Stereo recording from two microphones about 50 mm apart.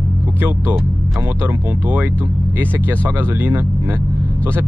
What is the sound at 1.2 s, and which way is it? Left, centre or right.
Speech, right.